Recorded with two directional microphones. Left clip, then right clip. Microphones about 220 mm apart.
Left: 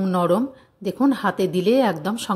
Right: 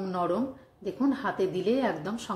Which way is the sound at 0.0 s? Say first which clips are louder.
Left 9 dB; 45° left (ahead or behind).